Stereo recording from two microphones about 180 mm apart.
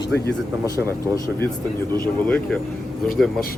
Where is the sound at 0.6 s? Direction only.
15° right (ahead or behind).